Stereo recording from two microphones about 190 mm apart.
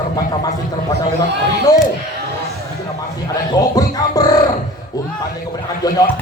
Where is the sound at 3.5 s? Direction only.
20° left (ahead or behind).